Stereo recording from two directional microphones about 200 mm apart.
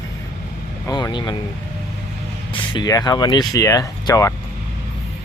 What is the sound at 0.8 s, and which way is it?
Speech, 20° left (ahead or behind).